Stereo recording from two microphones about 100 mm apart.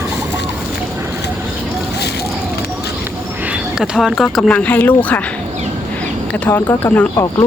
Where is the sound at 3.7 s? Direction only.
5° right (ahead or behind).